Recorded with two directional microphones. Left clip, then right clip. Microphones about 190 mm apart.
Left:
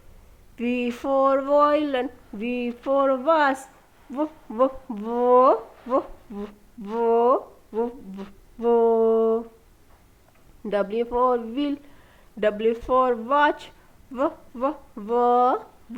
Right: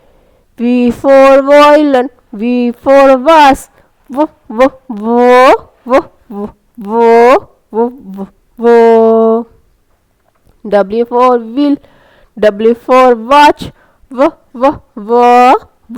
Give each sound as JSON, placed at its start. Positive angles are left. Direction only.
{"t": 0.5, "sound": "speech", "side_deg": -45}
{"t": 5.2, "sound": "speech", "side_deg": -25}
{"t": 6.8, "sound": "speech", "side_deg": -40}
{"t": 7.1, "sound": "speech", "side_deg": -30}
{"t": 10.7, "sound": "a woman's voice", "side_deg": -45}